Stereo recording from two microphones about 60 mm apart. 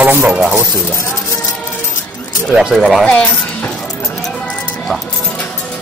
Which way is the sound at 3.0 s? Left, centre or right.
Left.